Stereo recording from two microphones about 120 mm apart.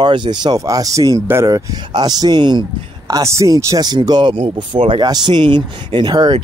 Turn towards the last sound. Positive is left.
turn(degrees=-40)  # may be behind; listen again after turning